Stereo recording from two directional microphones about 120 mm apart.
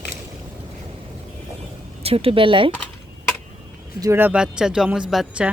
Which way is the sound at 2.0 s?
55° right (ahead or behind).